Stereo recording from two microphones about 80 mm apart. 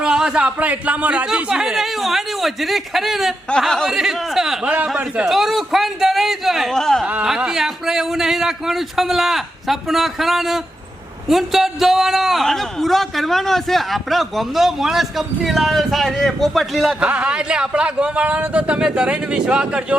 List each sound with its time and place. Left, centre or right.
0.0 s a man's voice: centre
4.6 s speech: centre
5.2 s speech: centre
7.0 s a man's voice: centre
17.0 s speech: centre